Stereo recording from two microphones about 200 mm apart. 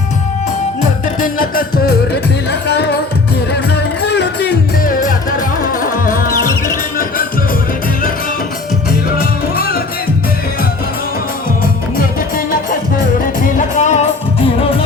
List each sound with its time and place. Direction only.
1.2 s music: 45° left (ahead or behind)
4.1 s music: 55° left (ahead or behind)
9.1 s music: 50° left (ahead or behind)
13.4 s music: 40° left (ahead or behind)